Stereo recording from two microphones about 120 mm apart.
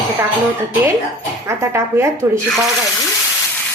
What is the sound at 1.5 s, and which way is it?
Speech, 25° right (ahead or behind).